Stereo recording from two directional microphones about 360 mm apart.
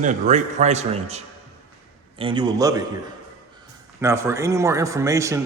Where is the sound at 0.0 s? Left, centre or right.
Centre.